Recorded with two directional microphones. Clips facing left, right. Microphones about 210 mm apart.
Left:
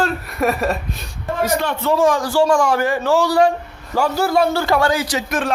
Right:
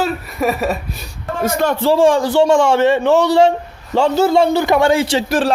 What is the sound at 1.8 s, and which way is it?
A man's voice, 30° right (ahead or behind).